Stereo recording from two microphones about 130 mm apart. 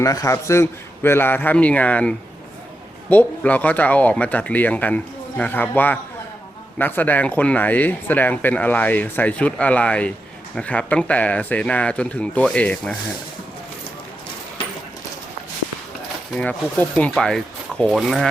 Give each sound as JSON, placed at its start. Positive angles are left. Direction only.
{"t": 0.0, "sound": "speech", "side_deg": 25}
{"t": 16.4, "sound": "speech", "side_deg": 10}